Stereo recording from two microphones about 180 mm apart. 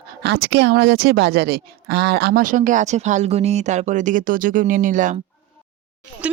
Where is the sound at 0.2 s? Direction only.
65° right (ahead or behind); by 5.2 s 45° right (ahead or behind).